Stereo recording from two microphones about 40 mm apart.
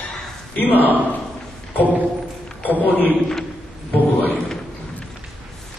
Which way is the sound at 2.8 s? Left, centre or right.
Left.